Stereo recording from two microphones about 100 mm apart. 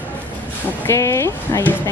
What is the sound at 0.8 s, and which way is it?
Speech, 30° left (ahead or behind).